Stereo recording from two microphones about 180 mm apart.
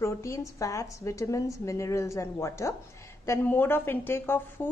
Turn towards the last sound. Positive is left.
turn(degrees=10)  # may be behind; listen again after turning